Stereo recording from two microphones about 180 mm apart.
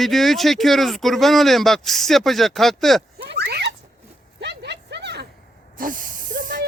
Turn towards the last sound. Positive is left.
turn(degrees=-50)  # may be behind; listen again after turning